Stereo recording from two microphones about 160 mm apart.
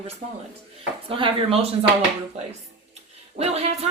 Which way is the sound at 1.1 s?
35° right (ahead or behind).